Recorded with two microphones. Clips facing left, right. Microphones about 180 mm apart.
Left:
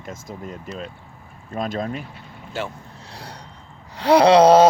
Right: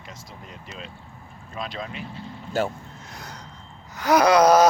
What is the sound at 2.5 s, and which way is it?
Speech, 40° right (ahead or behind).